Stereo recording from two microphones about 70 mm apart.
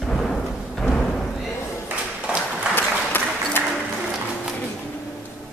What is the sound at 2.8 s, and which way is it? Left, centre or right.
Applause, left.